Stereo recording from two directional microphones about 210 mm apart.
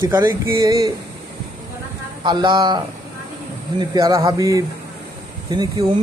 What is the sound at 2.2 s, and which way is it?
Speech, 20° right (ahead or behind).